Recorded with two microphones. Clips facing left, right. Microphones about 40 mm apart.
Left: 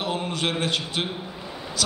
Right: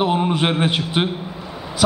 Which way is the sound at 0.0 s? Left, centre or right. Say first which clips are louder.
Right 8 dB; right.